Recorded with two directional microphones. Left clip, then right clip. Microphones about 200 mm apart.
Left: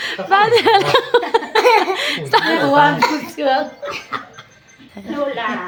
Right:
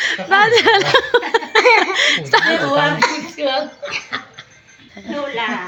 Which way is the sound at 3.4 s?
30° left (ahead or behind).